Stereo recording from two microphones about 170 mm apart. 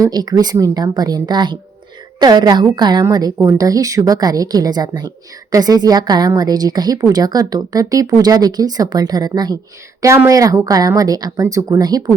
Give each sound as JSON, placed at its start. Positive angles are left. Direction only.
{"t": 0.0, "sound": "a woman's voice", "side_deg": -25}